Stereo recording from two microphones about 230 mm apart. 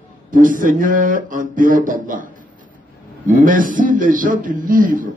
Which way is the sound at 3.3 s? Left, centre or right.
Right.